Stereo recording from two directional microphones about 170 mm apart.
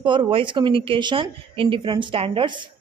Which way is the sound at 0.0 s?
30° right (ahead or behind).